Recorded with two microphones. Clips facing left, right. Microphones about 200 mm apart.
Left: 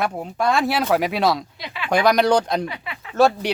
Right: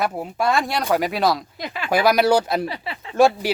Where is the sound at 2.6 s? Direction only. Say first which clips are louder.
Right 2 dB; 30° right (ahead or behind).